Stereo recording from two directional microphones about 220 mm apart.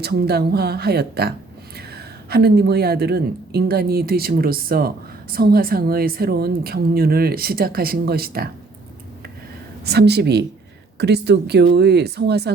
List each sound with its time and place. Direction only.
0.0 s speech: 45° right (ahead or behind)
9.8 s speech: 45° right (ahead or behind)